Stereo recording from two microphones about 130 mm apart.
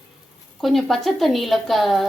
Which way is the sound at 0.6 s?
Centre (ahead or behind).